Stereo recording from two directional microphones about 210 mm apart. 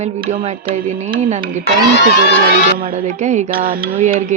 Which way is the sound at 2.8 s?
35° right (ahead or behind).